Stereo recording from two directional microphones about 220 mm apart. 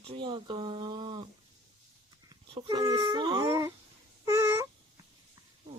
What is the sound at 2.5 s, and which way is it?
Speech, 20° right (ahead or behind).